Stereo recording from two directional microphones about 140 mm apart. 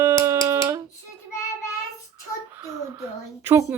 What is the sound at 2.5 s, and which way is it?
Speech, 15° right (ahead or behind).